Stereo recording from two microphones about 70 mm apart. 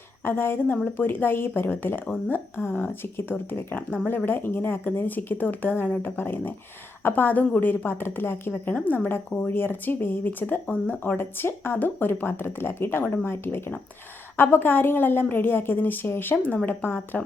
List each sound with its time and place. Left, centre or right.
0.3 s speech: left
11.2 s speech: left